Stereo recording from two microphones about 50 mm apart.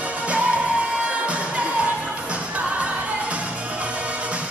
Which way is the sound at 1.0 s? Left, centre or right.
Right.